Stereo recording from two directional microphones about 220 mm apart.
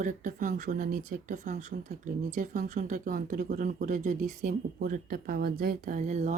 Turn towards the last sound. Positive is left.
turn(degrees=-30)  # may be behind; listen again after turning